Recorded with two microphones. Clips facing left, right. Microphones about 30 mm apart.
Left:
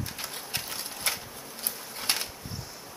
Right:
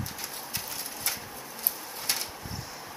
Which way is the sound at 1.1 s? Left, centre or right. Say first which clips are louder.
Left 4 dB; left.